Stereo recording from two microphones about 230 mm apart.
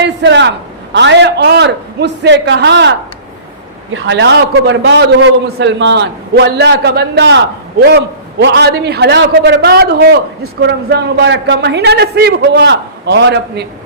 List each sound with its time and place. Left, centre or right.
0.0 s a sound: right
0.9 s a man's voice: right
3.9 s a man's voice: right